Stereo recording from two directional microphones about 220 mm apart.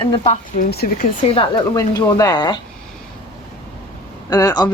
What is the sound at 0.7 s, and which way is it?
Speech, 45° left (ahead or behind).